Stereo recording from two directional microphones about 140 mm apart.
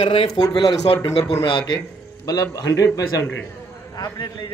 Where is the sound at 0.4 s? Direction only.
30° left (ahead or behind).